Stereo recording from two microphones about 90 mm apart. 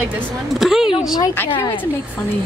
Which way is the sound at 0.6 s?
5° right (ahead or behind).